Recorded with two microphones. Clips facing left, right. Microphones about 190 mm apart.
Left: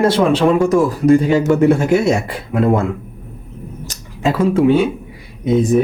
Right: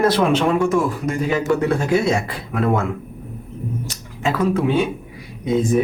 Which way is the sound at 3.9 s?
30° left (ahead or behind).